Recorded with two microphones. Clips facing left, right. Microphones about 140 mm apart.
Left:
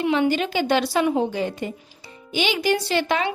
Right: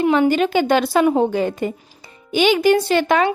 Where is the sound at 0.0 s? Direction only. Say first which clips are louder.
Right 5 dB; 45° right (ahead or behind).